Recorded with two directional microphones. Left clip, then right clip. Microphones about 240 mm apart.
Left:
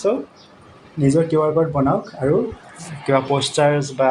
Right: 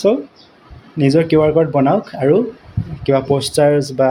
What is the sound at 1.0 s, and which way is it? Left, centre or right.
Speech, right.